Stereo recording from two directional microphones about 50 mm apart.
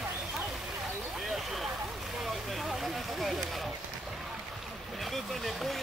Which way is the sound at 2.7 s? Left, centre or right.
Centre.